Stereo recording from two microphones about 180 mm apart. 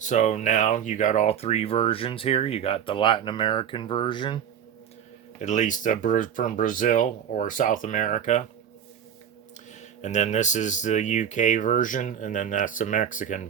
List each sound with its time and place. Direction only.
0.0 s speech: 40° left (ahead or behind); by 4.4 s 25° left (ahead or behind)
5.4 s speech: 40° left (ahead or behind)
10.0 s speech: 40° left (ahead or behind)